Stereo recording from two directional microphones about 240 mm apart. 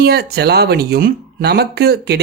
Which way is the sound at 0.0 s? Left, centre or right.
Right.